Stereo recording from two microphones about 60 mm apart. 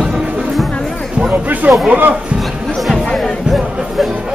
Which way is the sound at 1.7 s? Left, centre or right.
Right.